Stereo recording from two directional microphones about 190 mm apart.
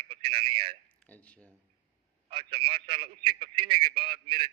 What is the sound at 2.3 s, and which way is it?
Speech, 30° right (ahead or behind).